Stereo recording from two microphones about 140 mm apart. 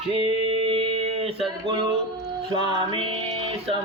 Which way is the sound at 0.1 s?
40° right (ahead or behind).